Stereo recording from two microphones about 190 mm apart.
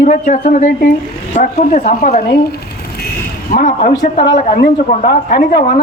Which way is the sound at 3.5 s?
50° left (ahead or behind).